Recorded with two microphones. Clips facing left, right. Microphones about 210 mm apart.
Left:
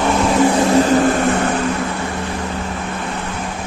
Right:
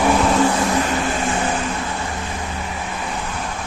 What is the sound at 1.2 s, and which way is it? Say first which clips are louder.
Vehicle: left 5 dB; 60° left (ahead or behind).